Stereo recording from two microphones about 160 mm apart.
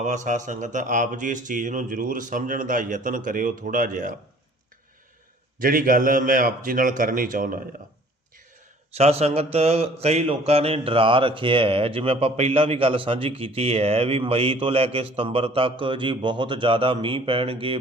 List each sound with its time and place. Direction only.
0.0 s speech: 50° right (ahead or behind)
5.5 s speech: 60° right (ahead or behind)
8.9 s mantra: 40° right (ahead or behind)